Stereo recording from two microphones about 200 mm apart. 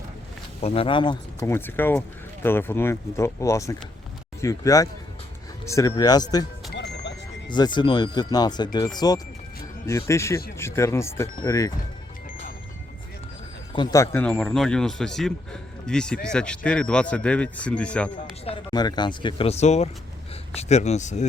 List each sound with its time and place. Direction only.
0.6 s speech: 30° left (ahead or behind)
6.7 s music: 60° left (ahead or behind)
7.4 s speech: 20° left (ahead or behind)
13.7 s speech: 15° left (ahead or behind)
18.2 s speech: 30° left (ahead or behind)